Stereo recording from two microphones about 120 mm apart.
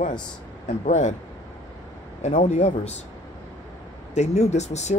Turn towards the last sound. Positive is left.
turn(degrees=70)  # may be behind; listen again after turning